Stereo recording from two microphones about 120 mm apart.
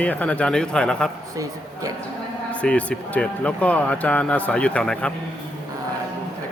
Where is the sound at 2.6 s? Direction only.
10° left (ahead or behind).